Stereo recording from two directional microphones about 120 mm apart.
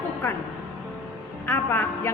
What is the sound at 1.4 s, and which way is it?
Speech, 15° left (ahead or behind).